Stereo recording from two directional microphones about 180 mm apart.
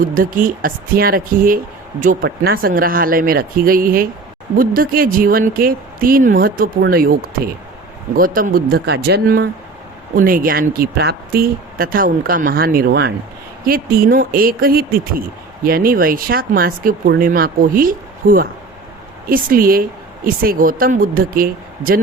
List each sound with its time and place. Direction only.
0.0 s speech: 50° right (ahead or behind)
10.2 s speech: 50° right (ahead or behind)